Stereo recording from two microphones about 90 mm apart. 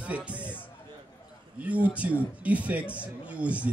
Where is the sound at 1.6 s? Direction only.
15° right (ahead or behind).